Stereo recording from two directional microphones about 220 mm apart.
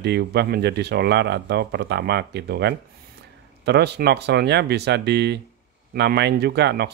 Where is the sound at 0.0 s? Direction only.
50° right (ahead or behind).